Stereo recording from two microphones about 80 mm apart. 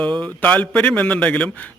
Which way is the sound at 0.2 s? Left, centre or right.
Centre.